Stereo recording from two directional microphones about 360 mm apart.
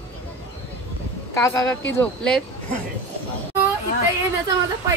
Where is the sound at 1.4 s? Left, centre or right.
Centre.